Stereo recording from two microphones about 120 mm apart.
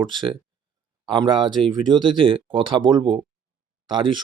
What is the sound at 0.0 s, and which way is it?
Speech, 40° right (ahead or behind).